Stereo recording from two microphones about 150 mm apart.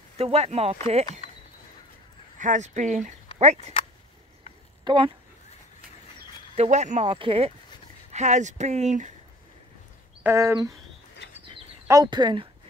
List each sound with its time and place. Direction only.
0.2 s speech: 45° right (ahead or behind)
2.3 s speech: 55° right (ahead or behind)
4.8 s speech: 35° right (ahead or behind)
6.5 s speech: 45° right (ahead or behind)
8.1 s speech: 50° right (ahead or behind)
10.2 s speech: 20° right (ahead or behind)
11.2 s bird: 90° left
11.9 s speech: 25° right (ahead or behind)